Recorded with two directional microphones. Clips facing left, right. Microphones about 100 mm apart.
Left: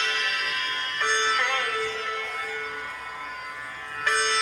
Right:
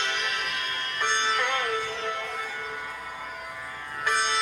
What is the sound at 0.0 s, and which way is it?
Music, 20° right (ahead or behind).